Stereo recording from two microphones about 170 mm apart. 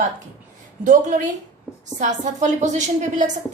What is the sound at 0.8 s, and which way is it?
A woman's voice, 50° right (ahead or behind).